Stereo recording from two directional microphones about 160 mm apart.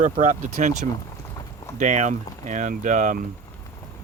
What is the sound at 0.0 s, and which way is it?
Speech, 50° right (ahead or behind).